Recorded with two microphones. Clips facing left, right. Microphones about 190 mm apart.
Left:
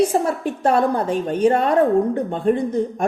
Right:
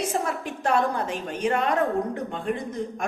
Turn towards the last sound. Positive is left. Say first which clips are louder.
# left 9 dB
turn(degrees=35)  # may be behind; listen again after turning